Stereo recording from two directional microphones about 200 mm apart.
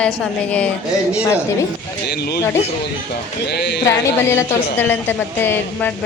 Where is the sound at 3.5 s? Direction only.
55° left (ahead or behind).